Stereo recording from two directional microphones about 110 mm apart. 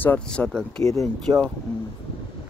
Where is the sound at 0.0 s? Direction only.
10° left (ahead or behind).